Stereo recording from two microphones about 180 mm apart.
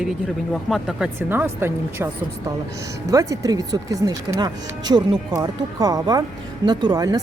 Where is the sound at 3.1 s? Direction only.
20° right (ahead or behind).